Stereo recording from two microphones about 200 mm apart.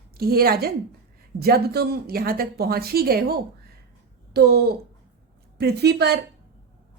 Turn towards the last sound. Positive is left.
turn(degrees=-55)  # may be behind; listen again after turning